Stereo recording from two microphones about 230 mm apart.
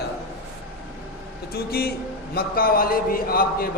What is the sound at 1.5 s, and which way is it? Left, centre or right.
A man's voice, left.